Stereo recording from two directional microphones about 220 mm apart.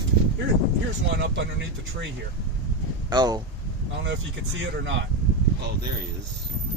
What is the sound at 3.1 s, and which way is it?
Speech, 20° right (ahead or behind).